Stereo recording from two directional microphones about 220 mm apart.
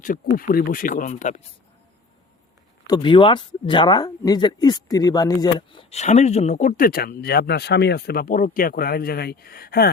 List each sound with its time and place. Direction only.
0.0 s speech: 40° left (ahead or behind)
2.8 s speech: 20° left (ahead or behind); by 9.9 s 45° left (ahead or behind)